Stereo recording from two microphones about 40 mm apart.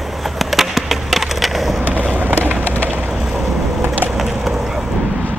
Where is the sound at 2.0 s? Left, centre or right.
Right.